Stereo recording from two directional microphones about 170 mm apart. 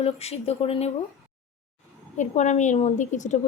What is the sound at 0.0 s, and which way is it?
Speech, 35° left (ahead or behind).